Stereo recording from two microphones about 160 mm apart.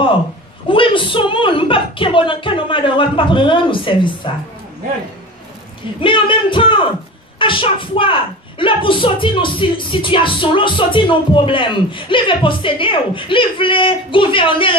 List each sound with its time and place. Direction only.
0.7 s a child's voice: 30° left (ahead or behind)
5.9 s a child's voice: 30° left (ahead or behind)